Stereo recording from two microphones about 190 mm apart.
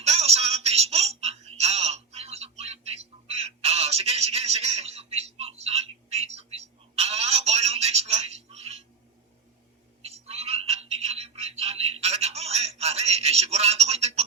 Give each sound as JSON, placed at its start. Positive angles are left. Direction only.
{"t": 0.0, "sound": "music", "side_deg": -35}
{"t": 10.0, "sound": "telephone", "side_deg": -35}